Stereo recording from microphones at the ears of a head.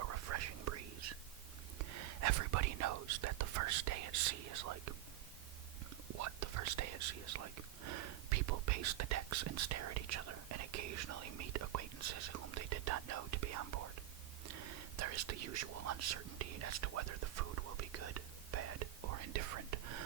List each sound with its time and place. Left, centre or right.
0.0 s whispering: right
6.1 s whispering: right